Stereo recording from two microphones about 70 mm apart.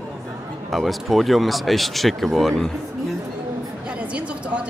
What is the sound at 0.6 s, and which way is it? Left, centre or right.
A man's voice, centre.